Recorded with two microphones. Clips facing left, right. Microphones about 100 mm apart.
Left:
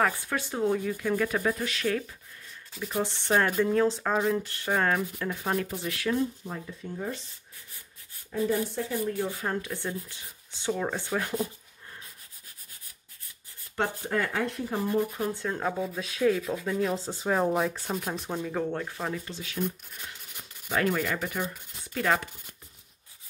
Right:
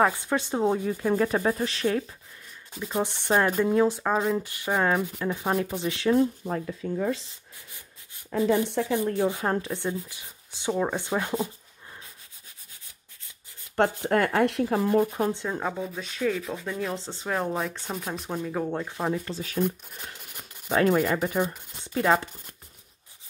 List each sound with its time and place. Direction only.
0.0 s speech: 20° right (ahead or behind)
3.0 s speech: 15° right (ahead or behind)
6.4 s speech: 65° right (ahead or behind)
6.8 s speech: 90° right
8.3 s speech: 75° right (ahead or behind)
9.7 s speech: 20° right (ahead or behind)
14.0 s speech: 65° right (ahead or behind)
15.4 s speech: 10° right (ahead or behind)
16.0 s speech: 5° left (ahead or behind)
18.7 s speech: 15° right (ahead or behind)
19.2 s speech: 45° right (ahead or behind)
20.6 s speech: 30° right (ahead or behind)